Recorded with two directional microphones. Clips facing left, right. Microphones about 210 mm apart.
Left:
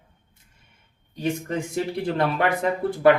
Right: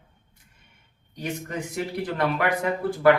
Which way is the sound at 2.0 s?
25° left (ahead or behind).